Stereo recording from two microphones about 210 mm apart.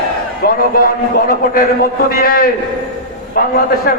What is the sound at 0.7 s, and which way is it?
A man's voice, 45° left (ahead or behind).